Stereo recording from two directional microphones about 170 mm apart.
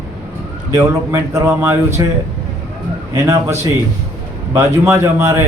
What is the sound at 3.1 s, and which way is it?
A man's voice, 15° right (ahead or behind).